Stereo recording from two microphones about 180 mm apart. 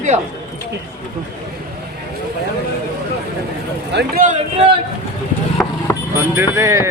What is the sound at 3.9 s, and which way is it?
Speech, 70° right (ahead or behind).